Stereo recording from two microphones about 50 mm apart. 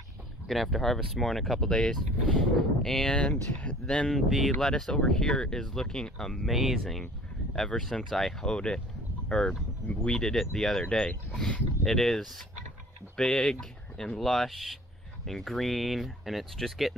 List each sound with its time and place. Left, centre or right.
0.5 s speech: centre
3.8 s speech: centre
4.3 s speech: centre
6.5 s speech: centre
6.8 s speech: centre
7.8 s speech: centre
14.3 s speech: centre